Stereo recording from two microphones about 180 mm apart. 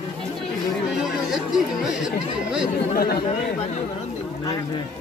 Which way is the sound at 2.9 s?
60° left (ahead or behind).